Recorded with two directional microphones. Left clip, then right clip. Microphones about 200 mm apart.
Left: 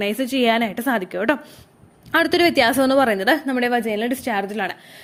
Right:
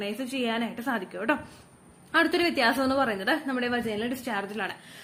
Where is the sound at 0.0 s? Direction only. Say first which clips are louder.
Left 11 dB; 45° left (ahead or behind).